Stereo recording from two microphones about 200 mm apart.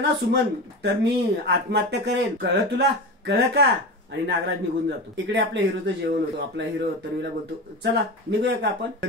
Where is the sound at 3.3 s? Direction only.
55° right (ahead or behind).